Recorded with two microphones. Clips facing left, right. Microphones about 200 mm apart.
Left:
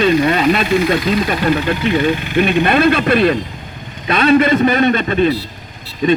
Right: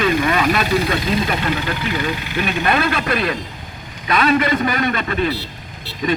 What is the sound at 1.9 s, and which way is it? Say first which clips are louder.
A man's voice: left 8 dB; 25° left (ahead or behind).